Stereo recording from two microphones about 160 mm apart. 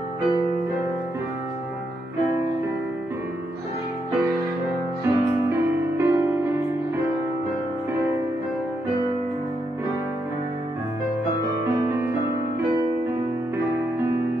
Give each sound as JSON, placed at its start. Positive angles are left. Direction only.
{"t": 5.0, "sound": "music", "side_deg": -15}
{"t": 11.6, "sound": "music", "side_deg": -15}